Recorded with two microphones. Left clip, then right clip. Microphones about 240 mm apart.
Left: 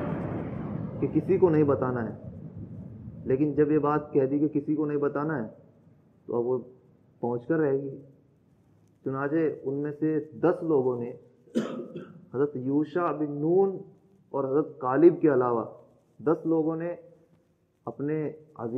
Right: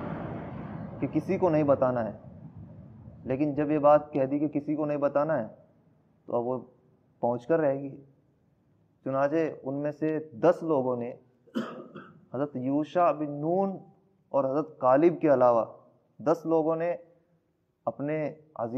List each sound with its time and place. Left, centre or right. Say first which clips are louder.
0.0 s a sound: left 4 dB; centre
1.1 s a man's voice: left 3 dB; right
3.3 s a man's voice: left 4 dB; right
9.0 s a man's voice: right 1 dB; right
11.5 s cough: left 4 dB; right
12.3 s a man's voice: left 3 dB; right